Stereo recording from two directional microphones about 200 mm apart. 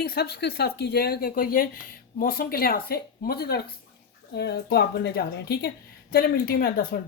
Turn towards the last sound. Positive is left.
turn(degrees=45)  # may be behind; listen again after turning